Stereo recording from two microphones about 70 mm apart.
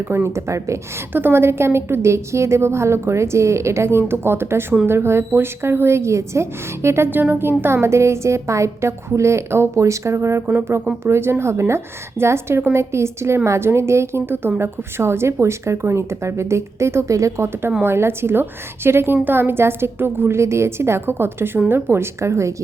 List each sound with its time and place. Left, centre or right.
0.3 s a woman's voice: right
1.1 s a woman's voice: right
17.8 s a woman's voice: right